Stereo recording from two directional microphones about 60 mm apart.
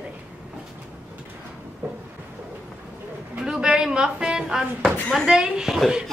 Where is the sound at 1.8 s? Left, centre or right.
Right.